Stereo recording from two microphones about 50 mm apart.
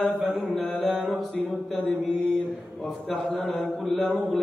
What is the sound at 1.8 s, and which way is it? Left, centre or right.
Mantra, centre.